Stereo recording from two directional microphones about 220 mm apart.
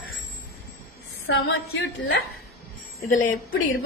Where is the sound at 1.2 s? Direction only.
55° left (ahead or behind).